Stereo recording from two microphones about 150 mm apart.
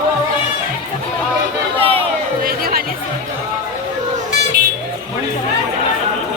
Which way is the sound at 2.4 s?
75° right (ahead or behind).